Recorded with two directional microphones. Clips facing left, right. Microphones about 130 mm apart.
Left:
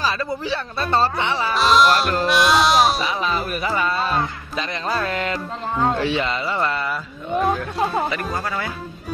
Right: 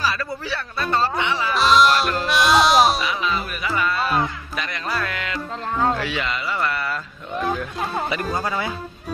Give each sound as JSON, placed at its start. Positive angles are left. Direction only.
{"t": 0.0, "sound": "speech", "side_deg": 25}
{"t": 1.5, "sound": "music", "side_deg": 0}
{"t": 3.0, "sound": "speech", "side_deg": 30}
{"t": 8.1, "sound": "speech", "side_deg": -25}